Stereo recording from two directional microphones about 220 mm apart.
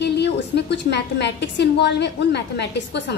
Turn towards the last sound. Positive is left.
turn(degrees=50)  # may be behind; listen again after turning